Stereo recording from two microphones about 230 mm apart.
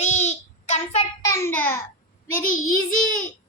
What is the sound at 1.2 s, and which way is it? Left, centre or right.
Speech, centre.